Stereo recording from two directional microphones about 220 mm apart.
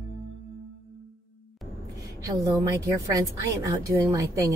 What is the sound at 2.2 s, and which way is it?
A woman's voice, 15° right (ahead or behind).